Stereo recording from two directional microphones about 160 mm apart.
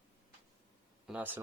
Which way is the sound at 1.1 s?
10° right (ahead or behind).